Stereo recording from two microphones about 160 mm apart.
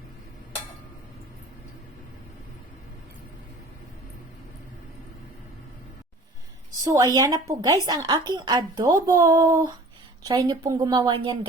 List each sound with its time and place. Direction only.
6.8 s a woman's voice: 20° right (ahead or behind)